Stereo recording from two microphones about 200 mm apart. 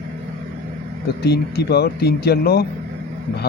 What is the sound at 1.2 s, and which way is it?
Speech, 55° left (ahead or behind).